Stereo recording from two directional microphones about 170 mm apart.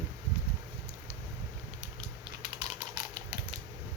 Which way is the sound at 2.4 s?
25° right (ahead or behind).